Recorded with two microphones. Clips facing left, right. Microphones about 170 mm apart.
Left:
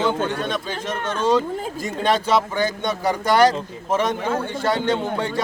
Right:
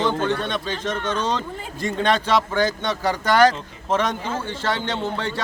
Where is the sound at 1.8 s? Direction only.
5° left (ahead or behind).